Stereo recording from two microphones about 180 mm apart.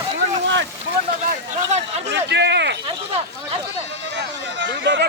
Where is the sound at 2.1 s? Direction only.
70° right (ahead or behind).